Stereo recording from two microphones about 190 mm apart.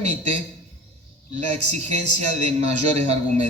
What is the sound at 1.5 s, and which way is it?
A man's voice, 35° right (ahead or behind).